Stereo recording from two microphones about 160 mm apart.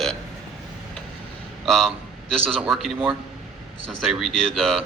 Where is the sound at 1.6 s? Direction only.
Centre (ahead or behind).